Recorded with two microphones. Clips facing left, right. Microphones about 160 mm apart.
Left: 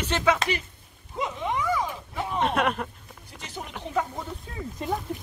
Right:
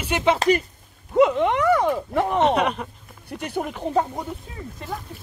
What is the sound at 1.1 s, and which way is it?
Speech, 65° right (ahead or behind).